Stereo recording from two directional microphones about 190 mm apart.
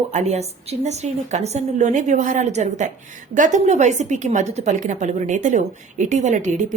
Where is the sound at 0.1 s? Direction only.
35° right (ahead or behind).